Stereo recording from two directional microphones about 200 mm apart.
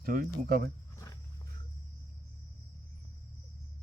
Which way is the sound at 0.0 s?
45° right (ahead or behind).